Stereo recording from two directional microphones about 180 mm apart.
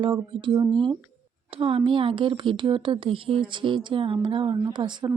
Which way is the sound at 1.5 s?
30° right (ahead or behind).